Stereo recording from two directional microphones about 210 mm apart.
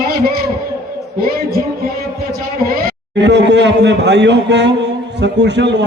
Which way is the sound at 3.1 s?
55° right (ahead or behind).